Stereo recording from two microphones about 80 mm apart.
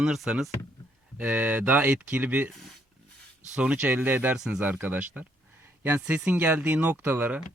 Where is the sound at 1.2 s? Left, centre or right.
Centre.